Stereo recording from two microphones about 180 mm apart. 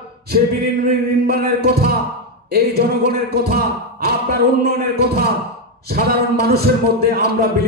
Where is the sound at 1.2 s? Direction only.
60° right (ahead or behind).